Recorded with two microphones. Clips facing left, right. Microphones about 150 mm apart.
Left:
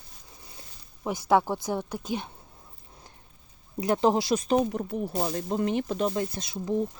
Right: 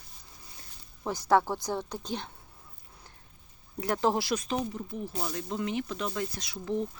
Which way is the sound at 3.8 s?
20° left (ahead or behind).